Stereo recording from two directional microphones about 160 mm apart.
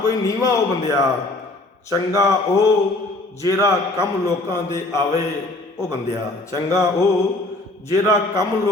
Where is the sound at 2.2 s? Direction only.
20° left (ahead or behind).